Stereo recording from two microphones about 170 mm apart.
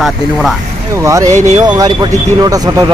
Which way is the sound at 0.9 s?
20° right (ahead or behind).